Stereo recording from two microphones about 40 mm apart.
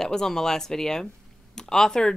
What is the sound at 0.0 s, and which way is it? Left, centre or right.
Speech, centre.